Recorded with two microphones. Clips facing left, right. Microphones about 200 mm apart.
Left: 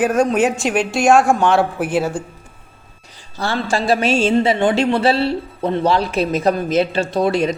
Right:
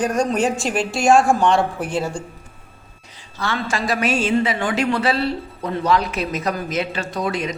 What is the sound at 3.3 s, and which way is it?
A woman's voice, 35° left (ahead or behind).